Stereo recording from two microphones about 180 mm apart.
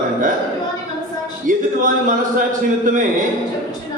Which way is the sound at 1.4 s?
45° right (ahead or behind).